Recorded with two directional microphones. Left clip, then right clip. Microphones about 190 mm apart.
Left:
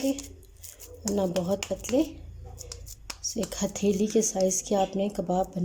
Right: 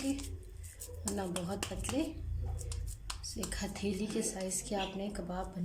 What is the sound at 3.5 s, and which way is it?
Speech, 35° left (ahead or behind).